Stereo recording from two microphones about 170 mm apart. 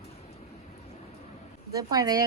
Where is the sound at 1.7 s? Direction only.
20° right (ahead or behind).